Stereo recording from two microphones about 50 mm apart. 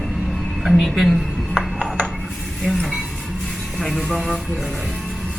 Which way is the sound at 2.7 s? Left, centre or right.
Centre.